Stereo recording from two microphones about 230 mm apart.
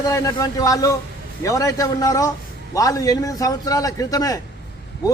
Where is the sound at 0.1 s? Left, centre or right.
Centre.